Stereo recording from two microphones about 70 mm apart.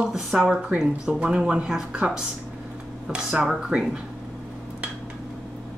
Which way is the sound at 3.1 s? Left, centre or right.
Centre.